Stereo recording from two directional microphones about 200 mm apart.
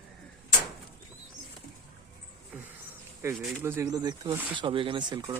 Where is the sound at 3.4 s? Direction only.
10° right (ahead or behind).